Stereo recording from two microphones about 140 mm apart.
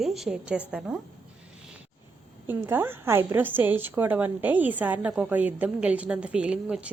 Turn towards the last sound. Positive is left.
turn(degrees=-10)  # may be behind; listen again after turning